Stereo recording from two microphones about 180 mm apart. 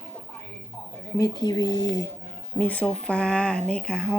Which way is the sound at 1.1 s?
20° left (ahead or behind).